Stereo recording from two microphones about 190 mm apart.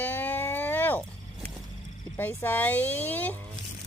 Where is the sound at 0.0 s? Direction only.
10° left (ahead or behind).